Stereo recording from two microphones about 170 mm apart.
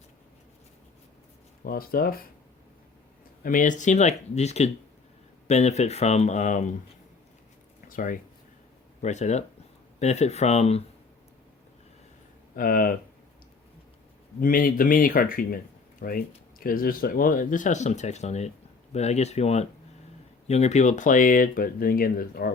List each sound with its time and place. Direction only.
1.6 s speech: 60° left (ahead or behind)
3.4 s speech: 50° left (ahead or behind)
7.9 s speech: 55° left (ahead or behind)
9.0 s speech: 45° left (ahead or behind)
12.5 s speech: 55° left (ahead or behind)
14.4 s speech: 55° left (ahead or behind)